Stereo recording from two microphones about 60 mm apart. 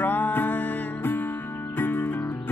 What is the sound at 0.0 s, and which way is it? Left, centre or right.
Music, left.